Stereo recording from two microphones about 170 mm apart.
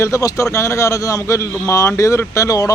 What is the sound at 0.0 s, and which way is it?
Speech, 20° left (ahead or behind).